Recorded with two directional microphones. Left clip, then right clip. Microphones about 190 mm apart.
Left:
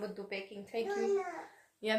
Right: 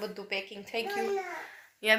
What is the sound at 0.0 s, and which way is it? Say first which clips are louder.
Speech: right 5 dB; 25° right (ahead or behind).